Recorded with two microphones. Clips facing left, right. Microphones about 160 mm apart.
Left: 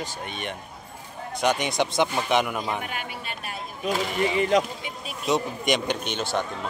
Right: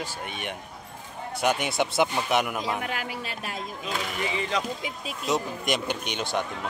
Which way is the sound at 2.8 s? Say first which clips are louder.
Right 2 dB; 90° right.